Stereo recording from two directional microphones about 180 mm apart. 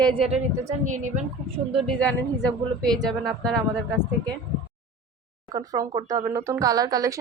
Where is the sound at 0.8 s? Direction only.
45° right (ahead or behind).